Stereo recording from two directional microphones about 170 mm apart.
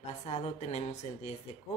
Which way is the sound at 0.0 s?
40° left (ahead or behind).